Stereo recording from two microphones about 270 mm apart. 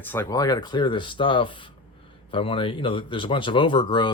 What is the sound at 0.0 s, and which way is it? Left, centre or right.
Speech, centre.